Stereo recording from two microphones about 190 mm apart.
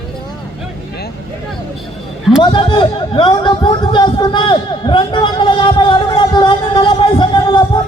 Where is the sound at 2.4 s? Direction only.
25° left (ahead or behind).